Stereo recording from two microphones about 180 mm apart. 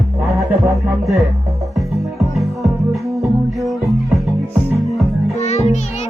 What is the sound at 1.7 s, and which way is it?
Music, centre (ahead or behind).